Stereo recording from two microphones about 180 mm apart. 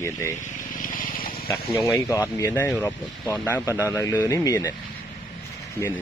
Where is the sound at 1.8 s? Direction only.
20° left (ahead or behind).